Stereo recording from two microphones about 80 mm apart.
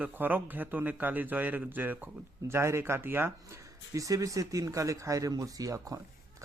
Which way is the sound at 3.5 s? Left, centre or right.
Right.